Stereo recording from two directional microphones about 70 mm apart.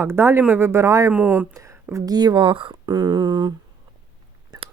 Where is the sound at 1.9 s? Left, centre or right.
Right.